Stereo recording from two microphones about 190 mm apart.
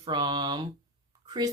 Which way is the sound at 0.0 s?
25° right (ahead or behind).